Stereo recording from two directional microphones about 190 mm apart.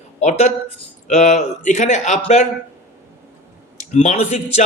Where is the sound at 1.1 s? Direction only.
35° left (ahead or behind).